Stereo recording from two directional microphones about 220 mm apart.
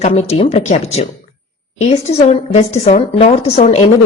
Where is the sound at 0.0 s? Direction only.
30° left (ahead or behind).